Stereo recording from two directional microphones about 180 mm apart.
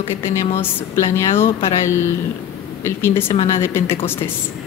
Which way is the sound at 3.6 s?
15° left (ahead or behind).